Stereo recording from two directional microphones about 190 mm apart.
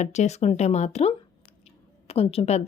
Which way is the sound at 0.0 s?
35° left (ahead or behind).